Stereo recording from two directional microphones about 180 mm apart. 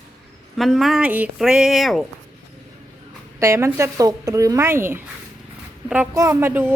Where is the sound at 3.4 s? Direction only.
15° right (ahead or behind).